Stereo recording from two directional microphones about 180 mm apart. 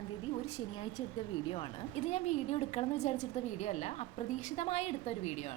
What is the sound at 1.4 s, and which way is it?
A woman's voice, 30° left (ahead or behind).